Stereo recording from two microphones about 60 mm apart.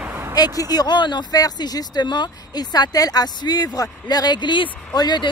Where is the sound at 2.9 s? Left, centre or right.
Left.